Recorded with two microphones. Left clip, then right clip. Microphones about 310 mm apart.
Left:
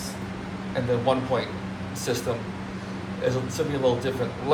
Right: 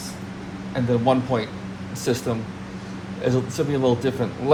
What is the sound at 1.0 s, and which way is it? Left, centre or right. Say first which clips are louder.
A man's voice: right 4 dB; right.